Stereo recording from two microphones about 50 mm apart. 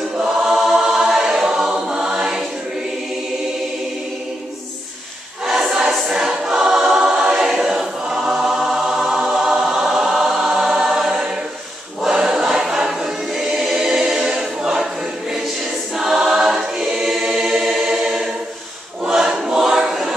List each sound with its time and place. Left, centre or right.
0.2 s choir: centre
0.6 s music: centre
5.5 s choir: centre
16.0 s choir: centre